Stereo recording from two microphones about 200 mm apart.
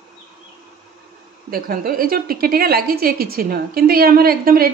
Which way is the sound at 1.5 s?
45° right (ahead or behind).